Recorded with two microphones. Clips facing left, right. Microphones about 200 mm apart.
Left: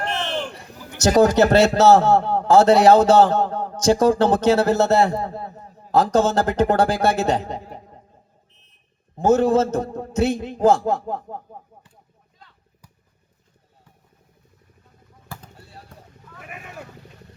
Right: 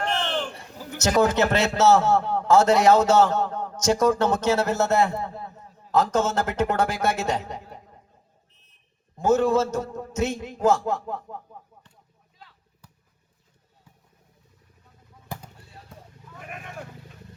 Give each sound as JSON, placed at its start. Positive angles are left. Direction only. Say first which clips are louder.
{"t": 0.0, "sound": "a sound", "louder": "left 1 dB", "side_deg": 10}
{"t": 1.0, "sound": "a man's voice", "louder": "left 6 dB", "side_deg": 40}
{"t": 9.4, "sound": "a man's voice", "louder": "left 4 dB", "side_deg": 35}
{"t": 16.5, "sound": "vehicle", "louder": "even", "side_deg": 5}